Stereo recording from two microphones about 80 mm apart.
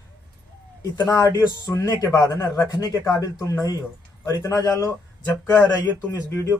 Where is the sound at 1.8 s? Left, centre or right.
Left.